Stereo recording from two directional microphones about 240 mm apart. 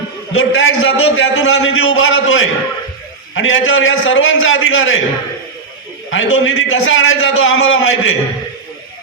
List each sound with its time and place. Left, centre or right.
0.3 s a man's voice: left
6.1 s a man's voice: left